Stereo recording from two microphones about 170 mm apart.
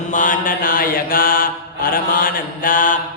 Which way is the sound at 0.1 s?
50° left (ahead or behind).